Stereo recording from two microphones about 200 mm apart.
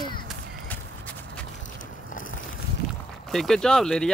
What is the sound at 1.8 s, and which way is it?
Vehicle, 40° left (ahead or behind).